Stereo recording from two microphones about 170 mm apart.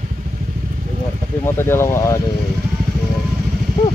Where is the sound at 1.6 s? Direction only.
15° left (ahead or behind).